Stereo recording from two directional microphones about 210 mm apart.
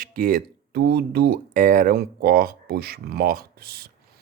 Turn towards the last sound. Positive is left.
turn(degrees=-45)  # may be behind; listen again after turning